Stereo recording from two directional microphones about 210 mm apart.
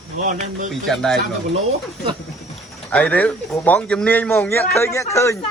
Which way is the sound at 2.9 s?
5° left (ahead or behind).